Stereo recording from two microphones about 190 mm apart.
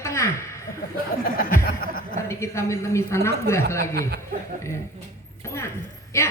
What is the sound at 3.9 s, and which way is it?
Speech, 55° right (ahead or behind).